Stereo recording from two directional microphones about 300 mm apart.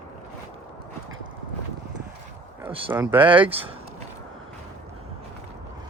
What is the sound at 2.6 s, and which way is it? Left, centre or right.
Speech, centre.